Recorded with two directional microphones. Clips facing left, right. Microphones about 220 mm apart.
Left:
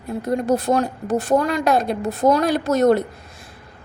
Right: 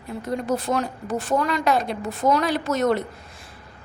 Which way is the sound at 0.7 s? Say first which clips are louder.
Left 5 dB; 40° left (ahead or behind).